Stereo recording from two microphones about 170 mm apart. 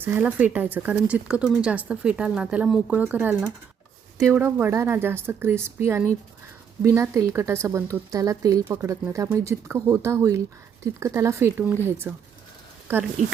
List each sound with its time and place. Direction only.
0.0 s a woman's voice: 10° right (ahead or behind)